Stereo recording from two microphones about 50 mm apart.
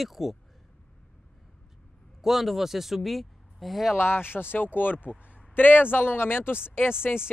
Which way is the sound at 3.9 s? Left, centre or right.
Left.